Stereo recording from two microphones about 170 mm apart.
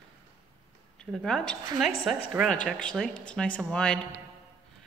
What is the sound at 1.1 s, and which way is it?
Speech, 5° left (ahead or behind).